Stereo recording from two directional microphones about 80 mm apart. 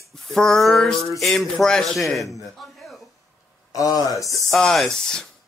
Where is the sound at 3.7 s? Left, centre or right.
Left.